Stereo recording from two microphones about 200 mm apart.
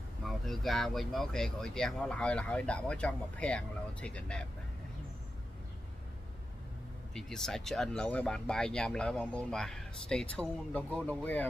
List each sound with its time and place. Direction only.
0.2 s speech: centre (ahead or behind)
7.2 s speech: centre (ahead or behind)